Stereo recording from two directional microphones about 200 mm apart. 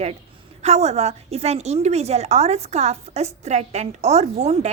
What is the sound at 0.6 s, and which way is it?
A woman's voice, 35° right (ahead or behind).